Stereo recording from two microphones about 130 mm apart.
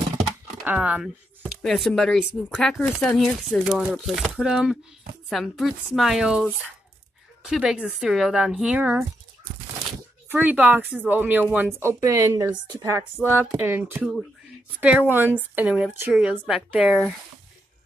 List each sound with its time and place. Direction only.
0.7 s speech: 10° right (ahead or behind)
1.6 s speech: centre (ahead or behind)
7.4 s speech: centre (ahead or behind)
10.3 s speech: 10° right (ahead or behind)